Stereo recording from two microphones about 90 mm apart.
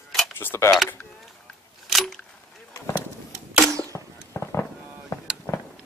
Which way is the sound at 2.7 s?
35° left (ahead or behind).